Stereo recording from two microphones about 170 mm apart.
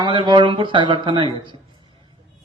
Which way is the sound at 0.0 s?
30° right (ahead or behind).